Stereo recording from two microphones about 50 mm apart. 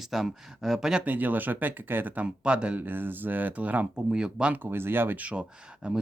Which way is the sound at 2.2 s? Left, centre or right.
Right.